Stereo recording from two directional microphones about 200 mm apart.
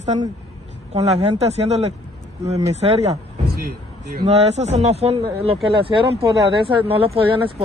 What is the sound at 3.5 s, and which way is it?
Vehicle, 50° right (ahead or behind).